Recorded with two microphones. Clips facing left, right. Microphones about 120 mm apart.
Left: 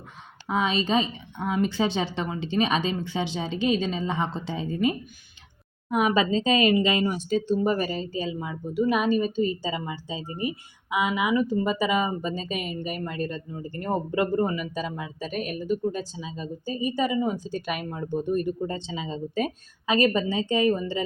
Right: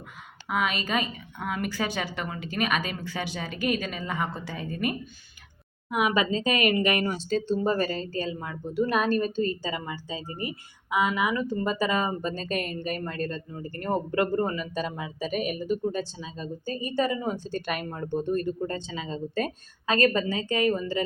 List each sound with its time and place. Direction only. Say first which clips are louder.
0.4 s a woman's voice: left 3 dB; 25° left (ahead or behind)
5.9 s speech: left 3 dB; 35° left (ahead or behind); by 14.8 s 10° left (ahead or behind)
14.8 s speech: right 1 dB; centre (ahead or behind)
15.9 s speech: even; 10° left (ahead or behind)
18.3 s a woman's voice: left 2 dB; 15° left (ahead or behind)